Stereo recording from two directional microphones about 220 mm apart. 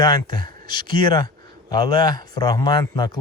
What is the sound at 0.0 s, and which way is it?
Speech, 20° left (ahead or behind).